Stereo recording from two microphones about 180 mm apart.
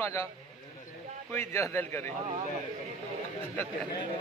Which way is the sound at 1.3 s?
15° left (ahead or behind).